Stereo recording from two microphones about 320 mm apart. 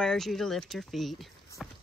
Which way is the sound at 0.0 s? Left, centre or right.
Centre.